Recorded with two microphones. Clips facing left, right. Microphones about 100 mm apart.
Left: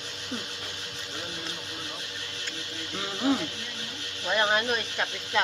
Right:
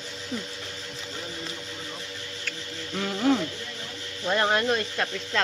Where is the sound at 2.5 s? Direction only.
15° left (ahead or behind).